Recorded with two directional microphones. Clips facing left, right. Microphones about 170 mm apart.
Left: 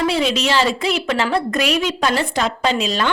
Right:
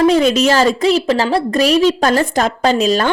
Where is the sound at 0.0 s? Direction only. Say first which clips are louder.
Right 7 dB; 45° right (ahead or behind).